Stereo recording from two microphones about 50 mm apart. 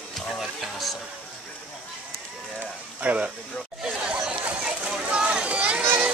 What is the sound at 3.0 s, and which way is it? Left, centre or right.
Speech, right.